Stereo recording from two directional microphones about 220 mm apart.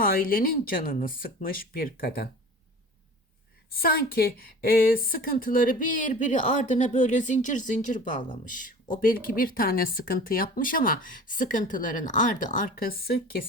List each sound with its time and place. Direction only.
0.0 s a woman's voice: 40° left (ahead or behind)
3.7 s a woman's voice: 45° left (ahead or behind)